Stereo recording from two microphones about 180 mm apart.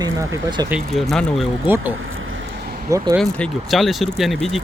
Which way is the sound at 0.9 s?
Centre (ahead or behind).